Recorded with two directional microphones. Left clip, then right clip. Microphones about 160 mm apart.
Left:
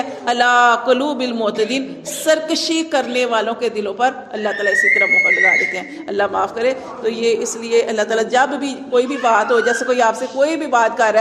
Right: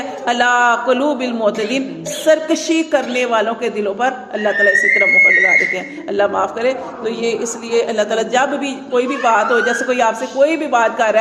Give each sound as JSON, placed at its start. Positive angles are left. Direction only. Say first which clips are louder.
{"t": 0.3, "sound": "a man's voice", "louder": "even", "side_deg": 40}
{"t": 6.6, "sound": "a man's voice", "louder": "right 1 dB", "side_deg": 55}
{"t": 8.9, "sound": "a man's voice", "louder": "even", "side_deg": 35}